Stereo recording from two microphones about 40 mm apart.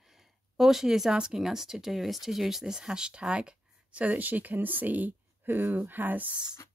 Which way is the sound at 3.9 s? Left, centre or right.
Right.